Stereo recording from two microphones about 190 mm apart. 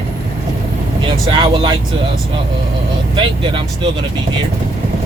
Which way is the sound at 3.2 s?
25° right (ahead or behind).